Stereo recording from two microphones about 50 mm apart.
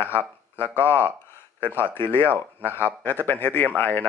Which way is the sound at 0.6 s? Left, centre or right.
Left.